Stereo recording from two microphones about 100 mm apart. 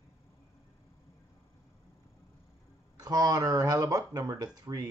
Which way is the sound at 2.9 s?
40° right (ahead or behind).